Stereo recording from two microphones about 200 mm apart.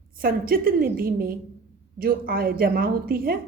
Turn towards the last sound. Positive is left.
turn(degrees=-45)  # may be behind; listen again after turning